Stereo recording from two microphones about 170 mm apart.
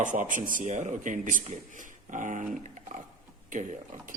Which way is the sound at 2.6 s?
45° right (ahead or behind).